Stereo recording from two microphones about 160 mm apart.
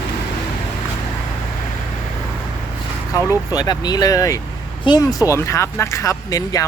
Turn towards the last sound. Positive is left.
turn(degrees=20)  # may be behind; listen again after turning